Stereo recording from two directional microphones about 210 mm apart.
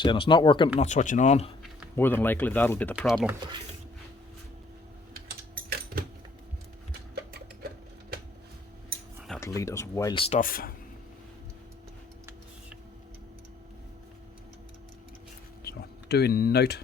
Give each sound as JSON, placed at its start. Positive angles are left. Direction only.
{"t": 0.0, "sound": "speech", "side_deg": 20}
{"t": 0.8, "sound": "speech", "side_deg": 35}
{"t": 2.0, "sound": "speech", "side_deg": 10}
{"t": 5.6, "sound": "a sound", "side_deg": -45}
{"t": 9.4, "sound": "speech", "side_deg": 15}
{"t": 10.4, "sound": "speech", "side_deg": 45}
{"t": 15.6, "sound": "speech", "side_deg": 50}